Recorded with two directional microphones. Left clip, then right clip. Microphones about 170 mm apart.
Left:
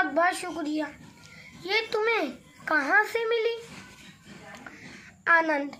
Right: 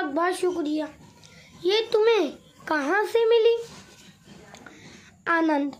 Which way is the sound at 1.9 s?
55° right (ahead or behind).